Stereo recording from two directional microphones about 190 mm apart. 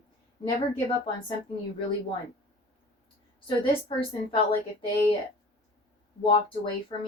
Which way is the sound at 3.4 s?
25° left (ahead or behind).